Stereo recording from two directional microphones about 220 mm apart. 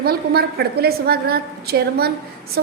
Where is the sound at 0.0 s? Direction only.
45° right (ahead or behind).